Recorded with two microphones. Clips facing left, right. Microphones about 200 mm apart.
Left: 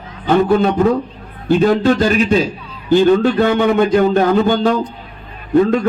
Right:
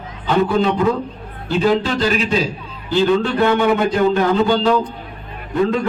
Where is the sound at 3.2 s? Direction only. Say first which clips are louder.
Left 2 dB; 50° left (ahead or behind).